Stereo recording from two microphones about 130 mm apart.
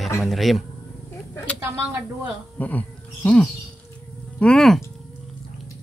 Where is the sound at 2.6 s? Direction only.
10° left (ahead or behind).